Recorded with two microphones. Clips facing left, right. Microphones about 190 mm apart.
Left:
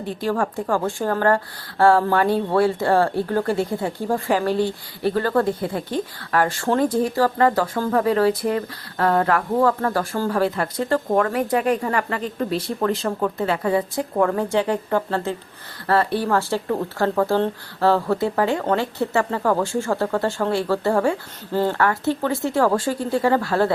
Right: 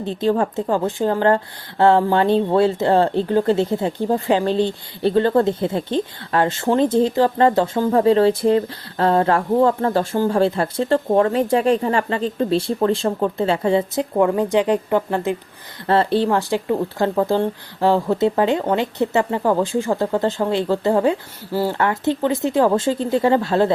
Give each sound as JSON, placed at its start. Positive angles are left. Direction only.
{"t": 0.0, "sound": "a woman's voice", "side_deg": -25}
{"t": 21.8, "sound": "speech", "side_deg": -20}